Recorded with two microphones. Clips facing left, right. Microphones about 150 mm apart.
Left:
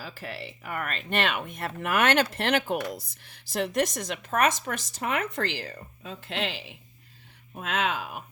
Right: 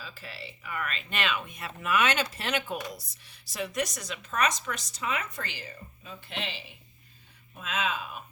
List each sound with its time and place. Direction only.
0.0 s speech: 65° left (ahead or behind); by 6.7 s 90° left
7.5 s speech: 65° left (ahead or behind)